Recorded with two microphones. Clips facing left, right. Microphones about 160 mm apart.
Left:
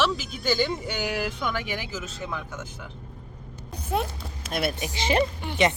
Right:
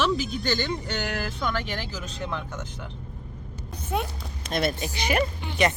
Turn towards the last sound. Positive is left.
turn(degrees=25)  # may be behind; listen again after turning